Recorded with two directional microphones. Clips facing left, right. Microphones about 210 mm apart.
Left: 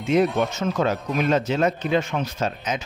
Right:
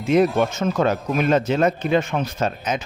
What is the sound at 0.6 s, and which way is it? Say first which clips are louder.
Speech: right 3 dB; 50° right (ahead or behind).